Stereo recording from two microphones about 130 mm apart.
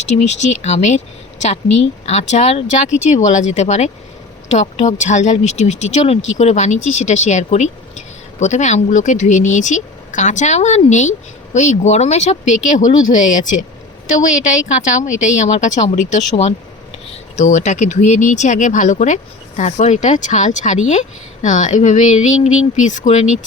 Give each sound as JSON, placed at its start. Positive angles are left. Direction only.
{"t": 0.0, "sound": "a woman's voice", "side_deg": 60}